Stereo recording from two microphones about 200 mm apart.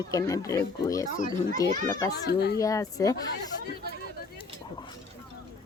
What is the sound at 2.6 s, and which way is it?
Speech, 15° left (ahead or behind).